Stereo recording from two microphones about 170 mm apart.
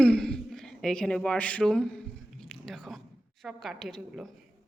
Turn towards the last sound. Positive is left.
turn(degrees=0)  # may be behind; listen again after turning